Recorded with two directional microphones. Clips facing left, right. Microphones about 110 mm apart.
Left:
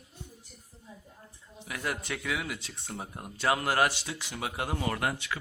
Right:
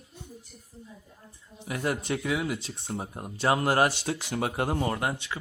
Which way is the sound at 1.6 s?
30° right (ahead or behind).